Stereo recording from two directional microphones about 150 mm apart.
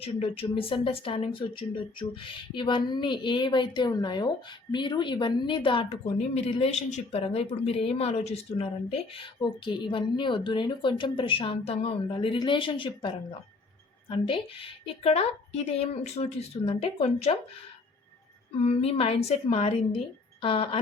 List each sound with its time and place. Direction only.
0.0 s speech: 40° left (ahead or behind)
18.5 s speech: 40° left (ahead or behind)